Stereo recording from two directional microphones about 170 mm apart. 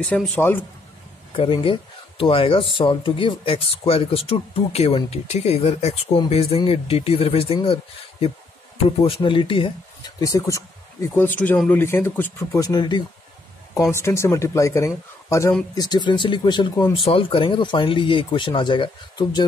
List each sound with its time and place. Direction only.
0.0 s speech: 10° left (ahead or behind)
1.3 s speech: 30° left (ahead or behind)
10.2 s speech: 20° left (ahead or behind)